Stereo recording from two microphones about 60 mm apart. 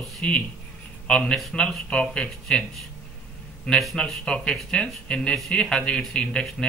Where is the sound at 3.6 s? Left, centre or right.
Centre.